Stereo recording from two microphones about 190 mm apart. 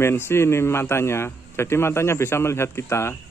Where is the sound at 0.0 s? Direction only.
15° left (ahead or behind).